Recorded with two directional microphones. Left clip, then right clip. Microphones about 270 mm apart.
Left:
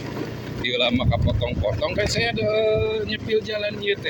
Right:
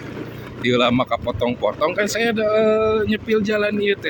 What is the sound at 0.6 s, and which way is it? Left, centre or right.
Speech, right.